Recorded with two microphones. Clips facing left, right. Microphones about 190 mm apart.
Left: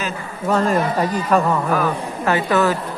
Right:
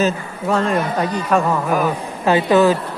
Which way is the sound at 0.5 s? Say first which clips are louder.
Even; centre (ahead or behind).